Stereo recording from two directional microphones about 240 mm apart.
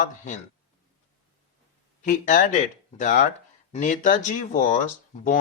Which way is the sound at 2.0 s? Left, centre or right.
Left.